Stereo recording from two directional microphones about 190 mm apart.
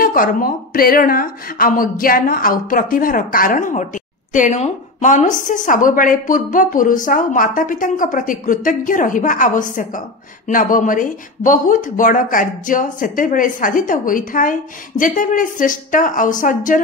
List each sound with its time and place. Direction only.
0.0 s speech: 50° left (ahead or behind)